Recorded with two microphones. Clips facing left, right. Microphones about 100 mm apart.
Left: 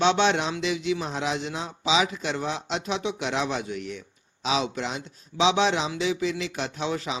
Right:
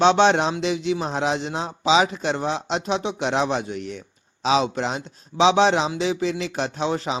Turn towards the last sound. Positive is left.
turn(degrees=-35)  # may be behind; listen again after turning